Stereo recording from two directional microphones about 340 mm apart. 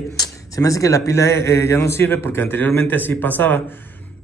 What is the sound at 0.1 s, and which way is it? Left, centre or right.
Speech, centre.